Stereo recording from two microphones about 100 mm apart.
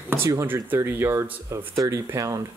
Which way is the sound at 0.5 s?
20° right (ahead or behind).